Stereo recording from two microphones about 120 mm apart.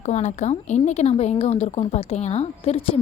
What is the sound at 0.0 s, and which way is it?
A woman's voice, 70° left (ahead or behind).